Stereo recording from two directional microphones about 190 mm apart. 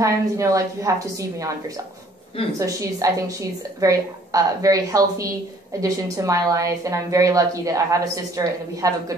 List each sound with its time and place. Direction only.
0.0 s a woman's voice: 15° right (ahead or behind)
2.6 s a woman's voice: 15° right (ahead or behind)